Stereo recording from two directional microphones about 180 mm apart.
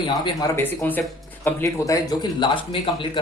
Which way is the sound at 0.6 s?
10° left (ahead or behind).